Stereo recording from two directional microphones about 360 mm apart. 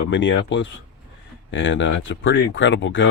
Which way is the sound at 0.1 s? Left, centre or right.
Left.